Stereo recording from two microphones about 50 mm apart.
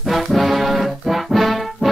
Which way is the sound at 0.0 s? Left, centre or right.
Centre.